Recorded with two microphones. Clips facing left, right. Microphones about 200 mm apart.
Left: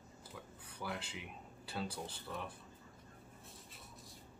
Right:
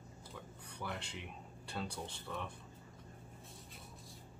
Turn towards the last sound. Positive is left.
turn(degrees=5)  # may be behind; listen again after turning